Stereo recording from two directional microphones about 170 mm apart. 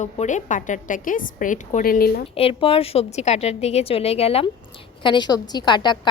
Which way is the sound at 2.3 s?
35° left (ahead or behind).